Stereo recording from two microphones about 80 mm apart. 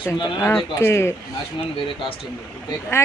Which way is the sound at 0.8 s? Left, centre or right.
Left.